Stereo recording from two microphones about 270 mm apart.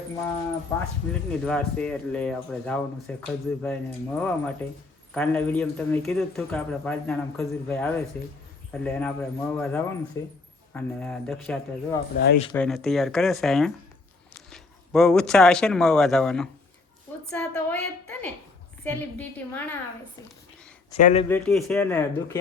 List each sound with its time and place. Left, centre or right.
1.5 s a man's voice: centre
12.1 s speech: left
12.5 s a man's voice: centre
21.0 s speech: left
21.2 s a man's voice: centre